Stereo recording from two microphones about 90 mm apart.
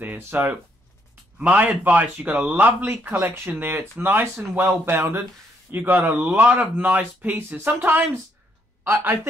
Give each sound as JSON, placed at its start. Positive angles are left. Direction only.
{"t": 0.0, "sound": "speech", "side_deg": -20}